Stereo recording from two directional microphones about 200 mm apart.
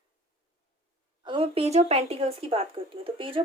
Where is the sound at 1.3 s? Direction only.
25° right (ahead or behind).